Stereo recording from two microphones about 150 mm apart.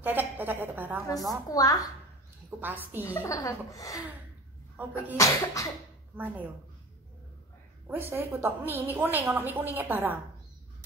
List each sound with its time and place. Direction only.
0.0 s a sound: 10° right (ahead or behind)
1.5 s speech: 25° left (ahead or behind)
2.6 s a woman's voice: 15° right (ahead or behind)
3.2 s speech: 20° left (ahead or behind)
4.8 s a woman's voice: 10° right (ahead or behind)
5.1 s speech: 20° left (ahead or behind)
6.1 s a woman's voice: 10° right (ahead or behind)
7.8 s a woman's voice: 15° right (ahead or behind)